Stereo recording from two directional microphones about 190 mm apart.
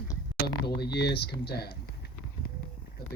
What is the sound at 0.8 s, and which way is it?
Speech, 60° left (ahead or behind).